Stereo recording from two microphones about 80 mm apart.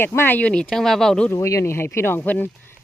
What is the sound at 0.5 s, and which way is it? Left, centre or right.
Speech, centre.